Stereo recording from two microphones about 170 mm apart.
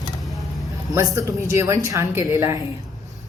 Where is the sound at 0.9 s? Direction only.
20° right (ahead or behind).